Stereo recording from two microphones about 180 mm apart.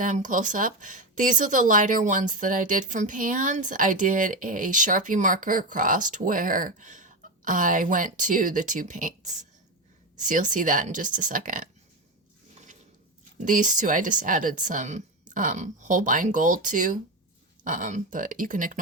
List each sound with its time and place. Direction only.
0.0 s speech: 45° right (ahead or behind)
13.4 s speech: 45° right (ahead or behind)